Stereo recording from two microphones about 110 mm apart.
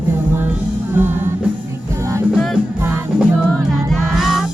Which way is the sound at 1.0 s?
20° right (ahead or behind).